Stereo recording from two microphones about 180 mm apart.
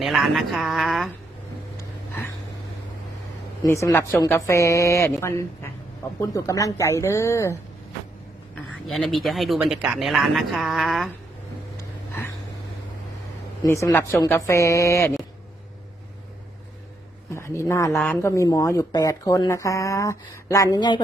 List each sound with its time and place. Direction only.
0.0 s speech: centre (ahead or behind)
3.6 s speech: 20° left (ahead or behind)
6.1 s speech: 20° left (ahead or behind)
8.9 s speech: centre (ahead or behind)
11.8 s a sound: 10° left (ahead or behind)
13.7 s speech: 15° left (ahead or behind)
17.3 s speech: 15° left (ahead or behind)